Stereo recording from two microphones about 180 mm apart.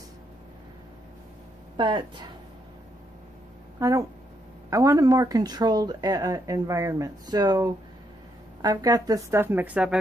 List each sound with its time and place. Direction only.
1.8 s speech: 25° right (ahead or behind)
3.8 s speech: 20° right (ahead or behind)